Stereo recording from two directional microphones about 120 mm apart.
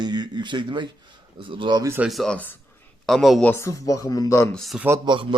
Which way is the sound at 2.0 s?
Centre (ahead or behind).